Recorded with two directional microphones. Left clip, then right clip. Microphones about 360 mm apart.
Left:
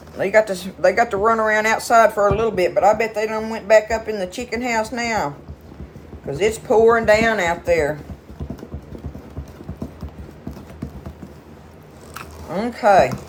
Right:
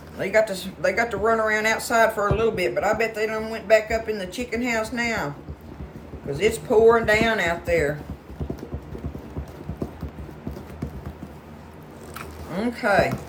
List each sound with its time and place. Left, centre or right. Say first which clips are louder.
0.2 s speech: left 4 dB; centre
6.3 s speech: left 3 dB; centre
12.5 s speech: left 7 dB; centre